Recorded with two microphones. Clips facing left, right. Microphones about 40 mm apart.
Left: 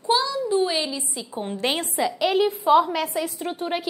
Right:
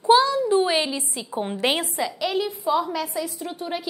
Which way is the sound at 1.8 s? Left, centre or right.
Centre.